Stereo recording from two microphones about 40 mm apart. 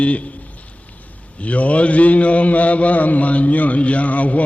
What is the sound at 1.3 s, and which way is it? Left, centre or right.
A man's voice, left.